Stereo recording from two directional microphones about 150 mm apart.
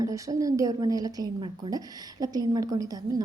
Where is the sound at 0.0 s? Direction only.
20° right (ahead or behind).